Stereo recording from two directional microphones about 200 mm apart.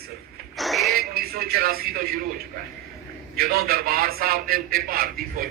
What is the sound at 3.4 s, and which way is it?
A man's voice, 45° right (ahead or behind).